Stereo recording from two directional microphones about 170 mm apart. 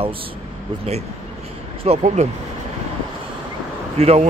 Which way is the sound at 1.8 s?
40° right (ahead or behind).